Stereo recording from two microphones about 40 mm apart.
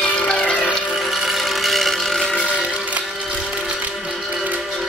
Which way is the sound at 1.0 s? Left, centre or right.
Centre.